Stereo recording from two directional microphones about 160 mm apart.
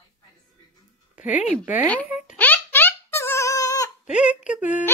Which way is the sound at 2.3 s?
10° left (ahead or behind).